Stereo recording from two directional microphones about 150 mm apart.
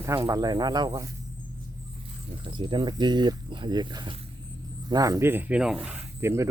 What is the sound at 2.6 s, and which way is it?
Speech, 30° right (ahead or behind).